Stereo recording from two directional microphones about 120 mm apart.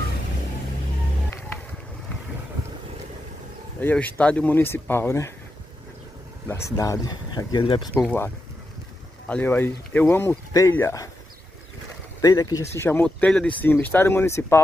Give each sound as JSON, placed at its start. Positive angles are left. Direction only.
{"t": 3.8, "sound": "speech", "side_deg": 10}
{"t": 6.4, "sound": "speech", "side_deg": 25}
{"t": 9.3, "sound": "speech", "side_deg": 15}
{"t": 12.2, "sound": "speech", "side_deg": 35}
{"t": 13.0, "sound": "speech", "side_deg": 10}